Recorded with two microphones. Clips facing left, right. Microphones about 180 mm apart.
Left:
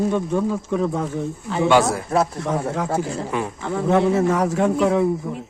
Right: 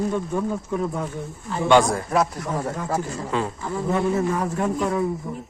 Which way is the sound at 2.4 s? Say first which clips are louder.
Left 3 dB; 90° left.